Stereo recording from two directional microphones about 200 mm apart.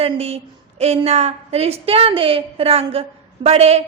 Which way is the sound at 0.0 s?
30° right (ahead or behind).